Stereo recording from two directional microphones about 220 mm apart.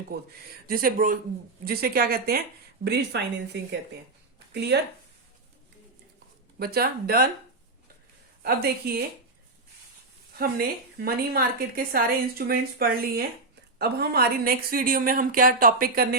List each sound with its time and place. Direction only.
0.7 s a woman's voice: 40° right (ahead or behind)
6.6 s a woman's voice: 45° right (ahead or behind)
8.4 s a woman's voice: 45° right (ahead or behind)
10.9 s a woman's voice: 45° right (ahead or behind)